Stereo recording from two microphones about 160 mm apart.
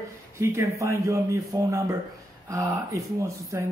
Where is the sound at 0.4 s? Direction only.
20° right (ahead or behind).